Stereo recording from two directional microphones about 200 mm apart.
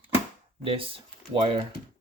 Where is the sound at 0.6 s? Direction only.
25° right (ahead or behind).